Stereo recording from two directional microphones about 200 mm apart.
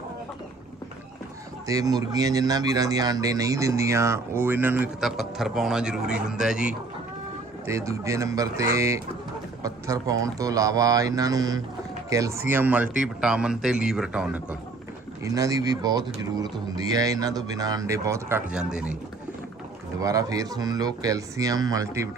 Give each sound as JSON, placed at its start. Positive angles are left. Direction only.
{"t": 1.6, "sound": "speech", "side_deg": -15}
{"t": 7.7, "sound": "a man's voice", "side_deg": -15}
{"t": 15.2, "sound": "speech", "side_deg": -15}
{"t": 20.0, "sound": "speech", "side_deg": -15}